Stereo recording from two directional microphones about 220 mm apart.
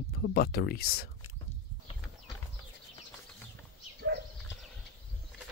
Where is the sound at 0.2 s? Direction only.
45° left (ahead or behind).